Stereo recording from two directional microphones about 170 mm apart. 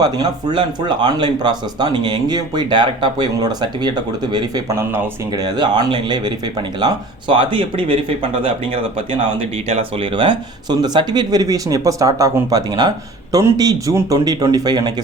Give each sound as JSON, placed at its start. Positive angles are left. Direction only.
{"t": 0.0, "sound": "speech", "side_deg": -25}